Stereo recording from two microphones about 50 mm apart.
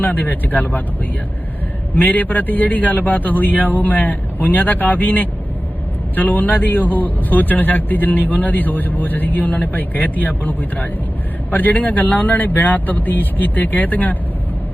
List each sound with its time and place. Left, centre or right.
0.0 s speech: left
2.0 s speech: left